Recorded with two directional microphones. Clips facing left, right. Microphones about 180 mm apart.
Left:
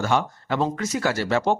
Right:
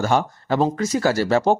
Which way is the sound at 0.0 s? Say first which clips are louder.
Right 3 dB; 40° right (ahead or behind).